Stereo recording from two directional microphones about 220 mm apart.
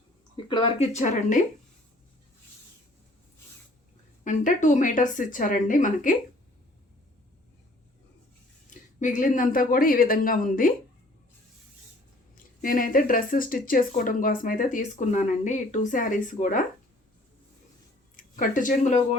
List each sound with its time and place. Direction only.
0.3 s speech: 20° left (ahead or behind)
4.2 s speech: 35° left (ahead or behind)
9.0 s speech: 35° left (ahead or behind)
12.6 s speech: 40° left (ahead or behind)
18.2 s speech: 35° left (ahead or behind)